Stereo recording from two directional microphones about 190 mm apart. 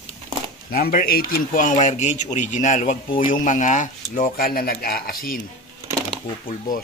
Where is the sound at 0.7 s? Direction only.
50° left (ahead or behind).